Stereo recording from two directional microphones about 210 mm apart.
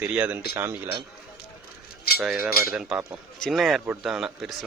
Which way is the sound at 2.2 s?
5° right (ahead or behind).